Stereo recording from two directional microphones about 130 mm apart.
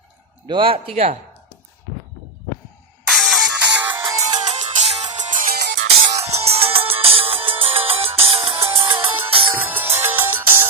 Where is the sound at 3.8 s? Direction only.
35° right (ahead or behind).